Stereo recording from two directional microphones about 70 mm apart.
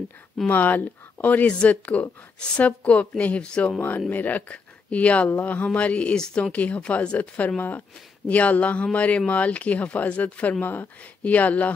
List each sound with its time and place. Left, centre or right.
0.5 s speech: left; by 6.5 s centre
6.5 s speech: centre